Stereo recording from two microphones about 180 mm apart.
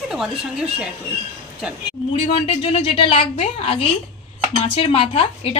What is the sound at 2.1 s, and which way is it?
A woman's voice, 35° left (ahead or behind).